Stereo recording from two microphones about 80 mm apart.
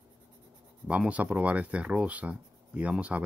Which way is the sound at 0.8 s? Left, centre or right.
Centre.